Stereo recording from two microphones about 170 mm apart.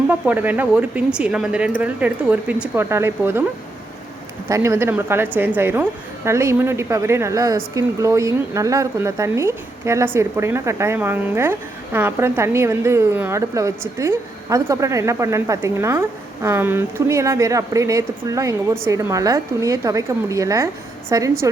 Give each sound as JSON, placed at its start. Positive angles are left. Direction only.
{"t": 0.1, "sound": "a woman's voice", "side_deg": -10}
{"t": 4.4, "sound": "a woman's voice", "side_deg": -15}